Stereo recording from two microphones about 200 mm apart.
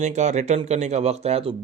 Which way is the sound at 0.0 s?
35° right (ahead or behind).